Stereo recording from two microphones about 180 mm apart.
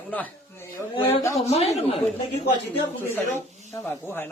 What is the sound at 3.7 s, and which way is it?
Speech, 15° left (ahead or behind).